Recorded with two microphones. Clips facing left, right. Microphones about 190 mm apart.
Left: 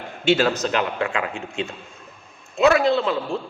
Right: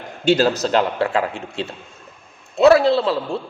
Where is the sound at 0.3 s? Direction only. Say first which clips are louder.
Right 3 dB; 35° right (ahead or behind).